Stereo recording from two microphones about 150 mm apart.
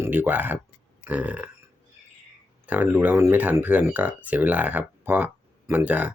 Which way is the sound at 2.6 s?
10° right (ahead or behind).